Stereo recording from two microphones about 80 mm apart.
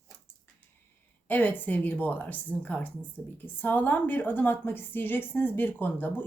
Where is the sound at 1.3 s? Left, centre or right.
Left.